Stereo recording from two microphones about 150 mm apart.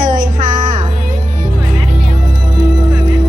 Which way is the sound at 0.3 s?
30° right (ahead or behind).